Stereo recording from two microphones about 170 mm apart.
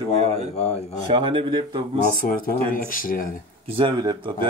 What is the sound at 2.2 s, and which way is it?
Speech, 60° left (ahead or behind).